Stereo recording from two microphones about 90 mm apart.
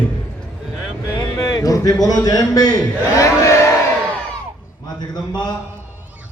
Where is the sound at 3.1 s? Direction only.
35° left (ahead or behind).